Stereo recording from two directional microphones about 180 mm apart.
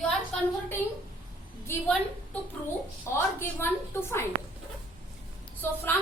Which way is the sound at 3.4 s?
15° left (ahead or behind).